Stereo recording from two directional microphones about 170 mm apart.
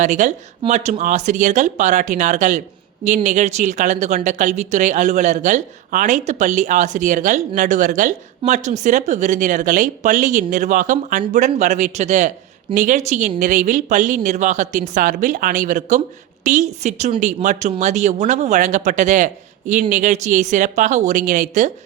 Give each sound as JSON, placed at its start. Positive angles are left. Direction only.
{"t": 0.0, "sound": "speech", "side_deg": -45}